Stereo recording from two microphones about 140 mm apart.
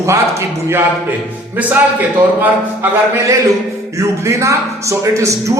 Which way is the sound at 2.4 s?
15° right (ahead or behind).